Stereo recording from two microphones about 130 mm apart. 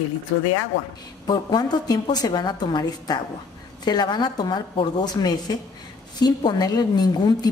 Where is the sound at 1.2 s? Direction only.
30° left (ahead or behind).